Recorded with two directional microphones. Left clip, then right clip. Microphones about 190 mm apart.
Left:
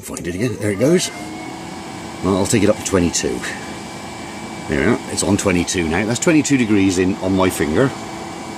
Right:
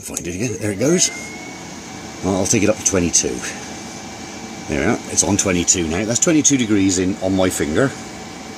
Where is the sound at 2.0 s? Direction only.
45° left (ahead or behind).